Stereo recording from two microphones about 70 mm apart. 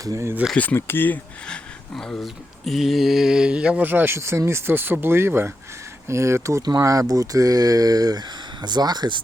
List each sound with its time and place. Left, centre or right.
0.0 s speech: right
0.5 s speech: left
1.5 s speech: centre
2.2 s speech: centre
3.8 s speech: right
6.6 s speech: right
8.6 s speech: right